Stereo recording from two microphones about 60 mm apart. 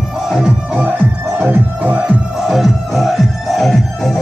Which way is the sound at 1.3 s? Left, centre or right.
Right.